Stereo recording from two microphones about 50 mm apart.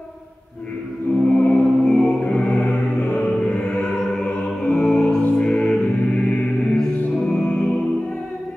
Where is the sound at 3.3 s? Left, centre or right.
Centre.